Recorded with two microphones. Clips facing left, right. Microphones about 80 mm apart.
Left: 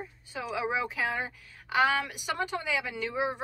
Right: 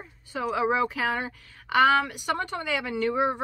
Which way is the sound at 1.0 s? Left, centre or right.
Right.